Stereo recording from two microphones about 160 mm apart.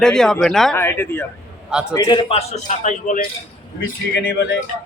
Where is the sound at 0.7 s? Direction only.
15° left (ahead or behind).